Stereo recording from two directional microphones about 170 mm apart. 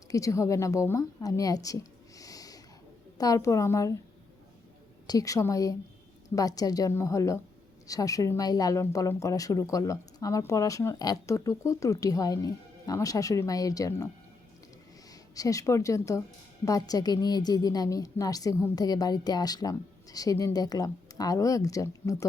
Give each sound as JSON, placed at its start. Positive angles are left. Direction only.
{"t": 0.1, "sound": "a woman's voice", "side_deg": 20}
{"t": 5.0, "sound": "speech", "side_deg": 20}
{"t": 15.1, "sound": "a woman's voice", "side_deg": 20}